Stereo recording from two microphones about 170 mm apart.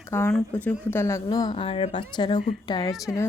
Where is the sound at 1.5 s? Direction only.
35° left (ahead or behind); by 3.2 s 15° left (ahead or behind).